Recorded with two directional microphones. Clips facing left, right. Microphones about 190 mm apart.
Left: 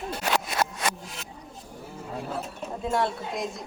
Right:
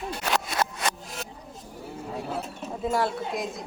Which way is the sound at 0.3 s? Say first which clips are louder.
Right 1 dB; 10° left (ahead or behind).